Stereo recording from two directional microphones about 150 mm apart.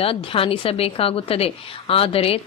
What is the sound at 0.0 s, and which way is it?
A woman's voice, 40° left (ahead or behind).